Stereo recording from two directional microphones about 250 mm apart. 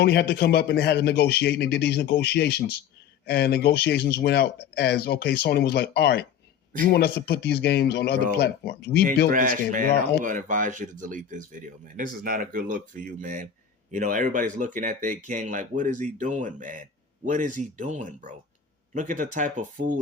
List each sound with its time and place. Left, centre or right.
0.0 s speech: left
9.3 s speech: right